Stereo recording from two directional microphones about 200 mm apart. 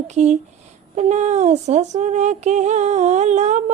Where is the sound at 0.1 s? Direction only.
35° right (ahead or behind).